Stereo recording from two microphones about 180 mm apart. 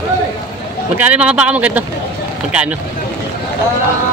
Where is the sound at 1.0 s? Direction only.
10° right (ahead or behind).